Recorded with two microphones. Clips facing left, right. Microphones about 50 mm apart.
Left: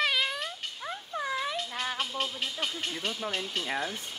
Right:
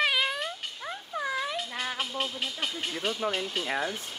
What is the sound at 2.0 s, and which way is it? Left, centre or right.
Speech, centre.